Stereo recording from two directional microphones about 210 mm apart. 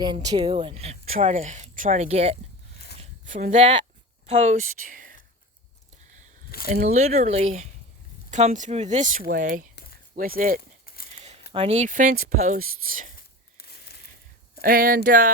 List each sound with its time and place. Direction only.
0.0 s speech: 20° right (ahead or behind)
2.7 s a sound: 50° left (ahead or behind)
3.0 s zipper: 35° right (ahead or behind)
4.3 s speech: 35° right (ahead or behind)
6.8 s speech: 30° right (ahead or behind)
10.8 s a sound: 45° left (ahead or behind)
11.5 s speech: 30° right (ahead or behind)
14.6 s speech: 45° right (ahead or behind)